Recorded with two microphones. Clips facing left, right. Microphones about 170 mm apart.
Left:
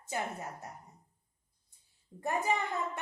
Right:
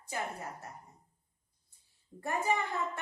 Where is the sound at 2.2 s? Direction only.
20° left (ahead or behind).